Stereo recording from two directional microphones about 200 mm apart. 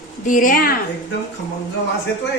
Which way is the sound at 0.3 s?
40° left (ahead or behind).